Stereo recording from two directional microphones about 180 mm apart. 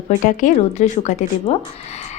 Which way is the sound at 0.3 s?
40° left (ahead or behind).